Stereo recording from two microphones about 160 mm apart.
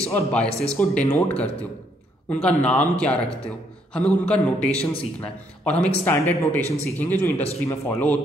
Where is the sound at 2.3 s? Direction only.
10° left (ahead or behind).